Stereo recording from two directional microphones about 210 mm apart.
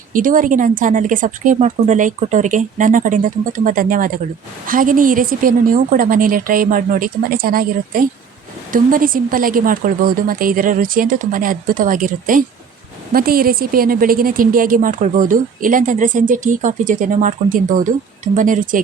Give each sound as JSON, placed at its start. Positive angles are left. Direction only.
{"t": 0.1, "sound": "a woman's voice", "side_deg": -40}